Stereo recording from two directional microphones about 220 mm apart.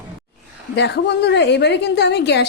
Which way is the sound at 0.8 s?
50° left (ahead or behind).